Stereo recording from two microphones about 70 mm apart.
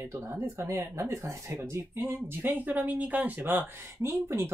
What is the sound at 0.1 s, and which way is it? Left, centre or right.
Speech, right.